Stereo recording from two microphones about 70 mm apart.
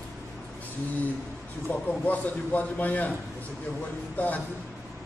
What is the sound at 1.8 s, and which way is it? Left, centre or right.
A man's voice, left.